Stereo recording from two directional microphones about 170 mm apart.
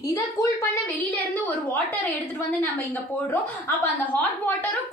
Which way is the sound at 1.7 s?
10° left (ahead or behind).